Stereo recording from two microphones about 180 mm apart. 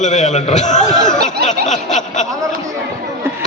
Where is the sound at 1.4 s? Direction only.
60° right (ahead or behind).